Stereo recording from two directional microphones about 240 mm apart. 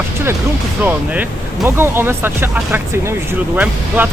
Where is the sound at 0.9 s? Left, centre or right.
Centre.